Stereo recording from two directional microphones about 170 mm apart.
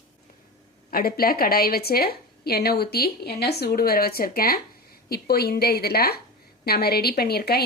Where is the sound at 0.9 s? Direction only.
60° left (ahead or behind).